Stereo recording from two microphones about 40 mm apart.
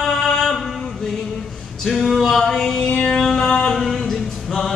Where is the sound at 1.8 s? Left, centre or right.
Centre.